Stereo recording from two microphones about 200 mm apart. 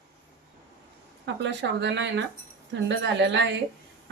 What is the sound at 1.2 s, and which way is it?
Speech, 60° right (ahead or behind).